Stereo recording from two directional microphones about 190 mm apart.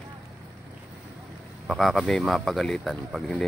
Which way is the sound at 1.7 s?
Centre (ahead or behind).